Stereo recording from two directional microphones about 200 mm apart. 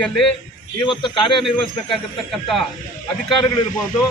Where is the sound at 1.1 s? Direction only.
25° left (ahead or behind).